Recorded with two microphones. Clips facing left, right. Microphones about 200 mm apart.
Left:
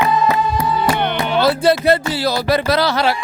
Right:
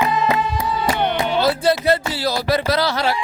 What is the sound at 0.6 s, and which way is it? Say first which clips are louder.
Music: left 3 dB; 70° left (ahead or behind).